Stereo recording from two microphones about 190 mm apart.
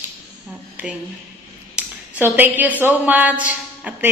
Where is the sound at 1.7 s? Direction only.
10° right (ahead or behind).